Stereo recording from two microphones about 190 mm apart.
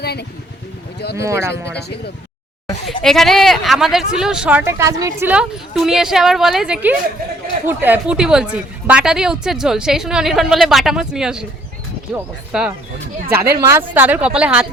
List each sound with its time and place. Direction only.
0.0 s speech: 60° left (ahead or behind)
1.1 s a woman's voice: 15° right (ahead or behind)
3.0 s a woman's voice: centre (ahead or behind); by 5.3 s 15° right (ahead or behind)
5.3 s a woman's voice: 5° right (ahead or behind)